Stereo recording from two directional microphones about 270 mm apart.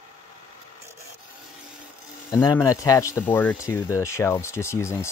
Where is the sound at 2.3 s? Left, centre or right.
Centre.